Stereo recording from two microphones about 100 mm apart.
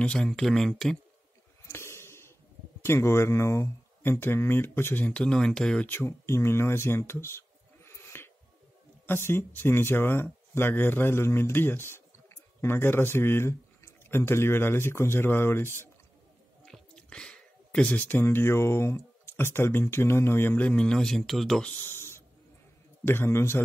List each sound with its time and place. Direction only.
0.0 s speech: 10° left (ahead or behind)
1.7 s a sound: 25° left (ahead or behind)
2.8 s speech: 25° left (ahead or behind); by 5.9 s 10° left (ahead or behind)
5.9 s speech: 25° left (ahead or behind)
16.6 s speech: 5° left (ahead or behind)
21.8 s a sound: 25° left (ahead or behind)
23.0 s speech: 25° left (ahead or behind)